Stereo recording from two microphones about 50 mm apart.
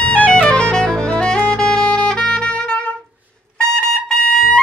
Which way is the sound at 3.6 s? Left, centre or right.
Centre.